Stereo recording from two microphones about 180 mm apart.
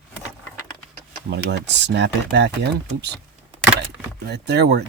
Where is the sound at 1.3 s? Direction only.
75° right (ahead or behind).